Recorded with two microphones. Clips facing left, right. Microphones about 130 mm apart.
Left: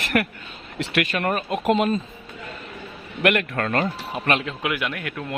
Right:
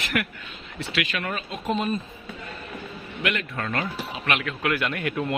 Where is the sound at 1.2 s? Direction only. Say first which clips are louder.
Left 8 dB; 55° left (ahead or behind); by 2.0 s 90° left.